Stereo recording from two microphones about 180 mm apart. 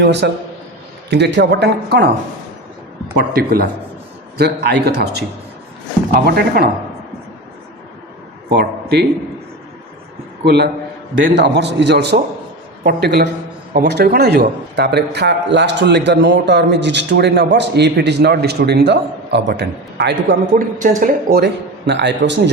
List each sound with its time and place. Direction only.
0.0 s a man's voice: 70° right (ahead or behind)
3.2 s a man's voice: 55° right (ahead or behind)
8.4 s a man's voice: 65° right (ahead or behind)
10.4 s a man's voice: 65° right (ahead or behind)
20.8 s a man's voice: 50° right (ahead or behind); by 22.4 s 75° right (ahead or behind)